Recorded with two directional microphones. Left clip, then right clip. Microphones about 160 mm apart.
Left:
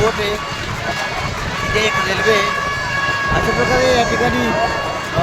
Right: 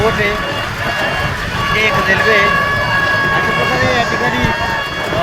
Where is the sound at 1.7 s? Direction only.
30° left (ahead or behind).